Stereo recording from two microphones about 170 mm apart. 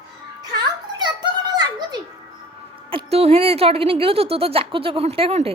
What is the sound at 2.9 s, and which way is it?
A woman's voice, 35° right (ahead or behind).